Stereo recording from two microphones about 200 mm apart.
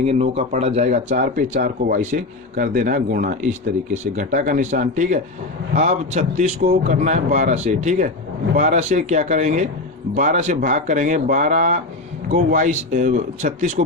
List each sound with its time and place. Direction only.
0.0 s speech: 30° right (ahead or behind)